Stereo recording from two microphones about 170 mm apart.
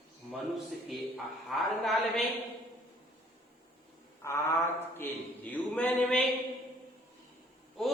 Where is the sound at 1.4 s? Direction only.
Centre (ahead or behind).